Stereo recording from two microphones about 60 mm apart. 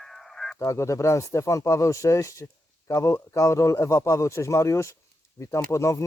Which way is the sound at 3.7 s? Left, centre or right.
Left.